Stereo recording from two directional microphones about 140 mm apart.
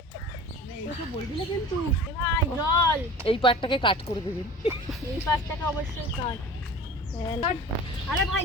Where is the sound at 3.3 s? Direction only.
40° left (ahead or behind).